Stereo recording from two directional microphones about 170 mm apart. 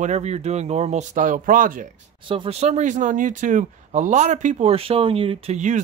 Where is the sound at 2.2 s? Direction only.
30° right (ahead or behind).